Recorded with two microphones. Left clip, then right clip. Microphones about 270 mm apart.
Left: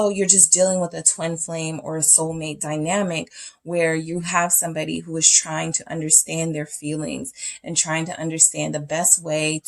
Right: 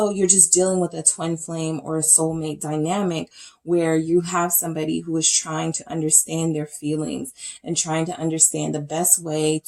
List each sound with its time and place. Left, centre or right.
0.0 s speech: left